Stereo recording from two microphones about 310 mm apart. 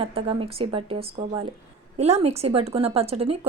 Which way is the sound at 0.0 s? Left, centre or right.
Centre.